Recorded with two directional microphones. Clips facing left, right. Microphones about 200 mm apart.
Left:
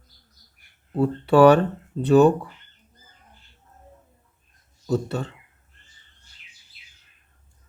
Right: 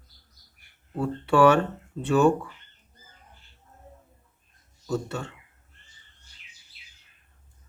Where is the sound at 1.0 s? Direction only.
35° left (ahead or behind).